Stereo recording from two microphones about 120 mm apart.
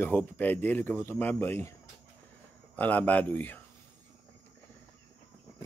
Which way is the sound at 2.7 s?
15° left (ahead or behind).